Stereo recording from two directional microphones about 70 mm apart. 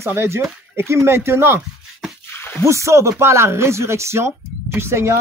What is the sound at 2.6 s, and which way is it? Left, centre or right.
Speech, right.